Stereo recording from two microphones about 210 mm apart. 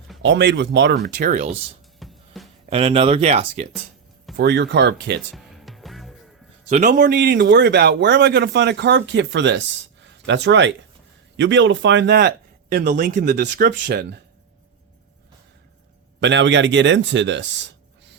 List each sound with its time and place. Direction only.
0.2 s a man's voice: 55° right (ahead or behind); by 1.5 s 35° right (ahead or behind)
2.0 s music: centre (ahead or behind)
2.6 s speech: 30° right (ahead or behind)
4.4 s a man's voice: 50° right (ahead or behind)
5.3 s music: centre (ahead or behind)
6.7 s a man's voice: 35° right (ahead or behind)
6.9 s a man's voice: 55° right (ahead or behind)
16.2 s speech: 60° right (ahead or behind)